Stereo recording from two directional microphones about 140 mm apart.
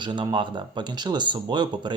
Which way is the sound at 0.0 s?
35° right (ahead or behind).